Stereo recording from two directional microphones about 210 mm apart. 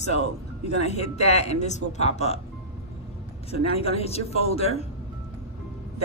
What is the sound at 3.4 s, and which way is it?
A man's voice, 30° left (ahead or behind).